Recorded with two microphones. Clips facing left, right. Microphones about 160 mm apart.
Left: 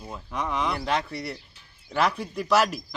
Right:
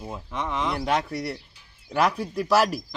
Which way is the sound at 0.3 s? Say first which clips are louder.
Even; 10° left (ahead or behind).